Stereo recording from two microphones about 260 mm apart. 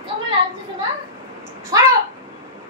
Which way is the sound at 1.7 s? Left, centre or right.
Centre.